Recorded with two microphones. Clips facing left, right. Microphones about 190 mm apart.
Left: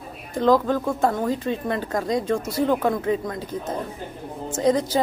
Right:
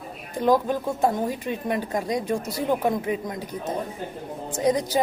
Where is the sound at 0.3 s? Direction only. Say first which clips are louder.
Left 2 dB; 15° right (ahead or behind).